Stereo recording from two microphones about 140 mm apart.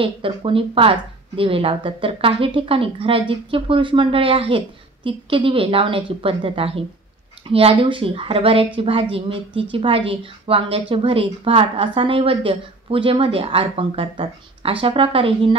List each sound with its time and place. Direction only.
0.0 s speech: 40° right (ahead or behind)